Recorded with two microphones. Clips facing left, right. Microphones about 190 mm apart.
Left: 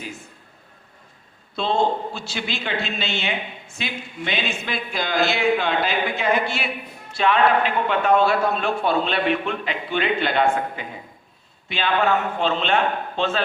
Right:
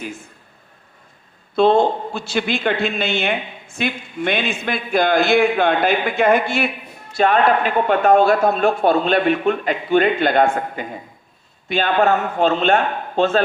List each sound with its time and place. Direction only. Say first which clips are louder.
1.5 s speech: right 7 dB; 55° right (ahead or behind)